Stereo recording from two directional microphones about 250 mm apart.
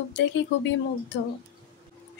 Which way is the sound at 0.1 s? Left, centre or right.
Left.